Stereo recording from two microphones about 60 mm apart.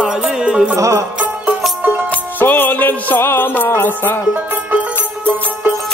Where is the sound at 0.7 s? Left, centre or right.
Right.